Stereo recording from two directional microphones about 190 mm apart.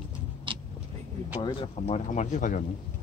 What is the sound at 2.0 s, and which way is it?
Speech, 40° left (ahead or behind).